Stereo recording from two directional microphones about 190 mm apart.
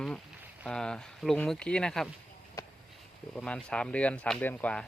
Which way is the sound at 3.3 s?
5° left (ahead or behind).